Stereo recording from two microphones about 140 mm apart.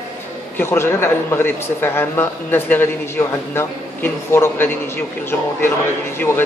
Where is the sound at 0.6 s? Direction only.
15° left (ahead or behind).